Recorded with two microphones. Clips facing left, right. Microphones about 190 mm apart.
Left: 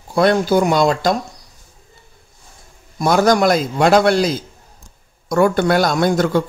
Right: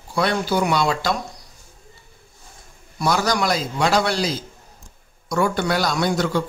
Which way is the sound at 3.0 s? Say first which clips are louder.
Left 7 dB; 50° left (ahead or behind).